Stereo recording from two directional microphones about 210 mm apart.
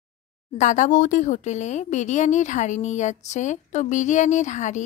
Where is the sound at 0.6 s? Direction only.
35° left (ahead or behind).